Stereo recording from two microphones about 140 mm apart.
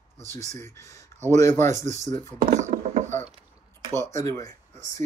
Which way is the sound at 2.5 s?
60° right (ahead or behind).